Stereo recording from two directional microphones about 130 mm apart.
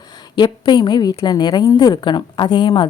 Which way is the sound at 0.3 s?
35° left (ahead or behind).